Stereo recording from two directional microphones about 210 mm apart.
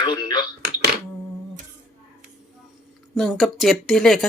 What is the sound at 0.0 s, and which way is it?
Speech, 20° left (ahead or behind).